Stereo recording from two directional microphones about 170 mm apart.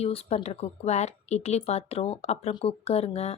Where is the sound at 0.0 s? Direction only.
35° left (ahead or behind).